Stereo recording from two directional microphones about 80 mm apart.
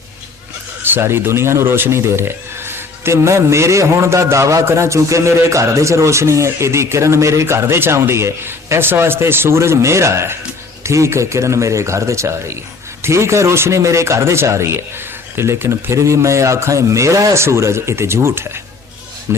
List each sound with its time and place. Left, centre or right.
0.8 s speech: right